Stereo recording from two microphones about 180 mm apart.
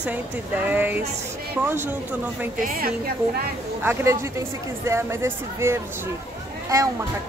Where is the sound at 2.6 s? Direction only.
55° right (ahead or behind).